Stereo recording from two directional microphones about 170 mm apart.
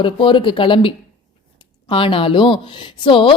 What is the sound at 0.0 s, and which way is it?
A woman's voice, 30° left (ahead or behind).